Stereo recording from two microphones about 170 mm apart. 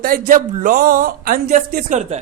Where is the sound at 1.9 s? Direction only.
40° right (ahead or behind).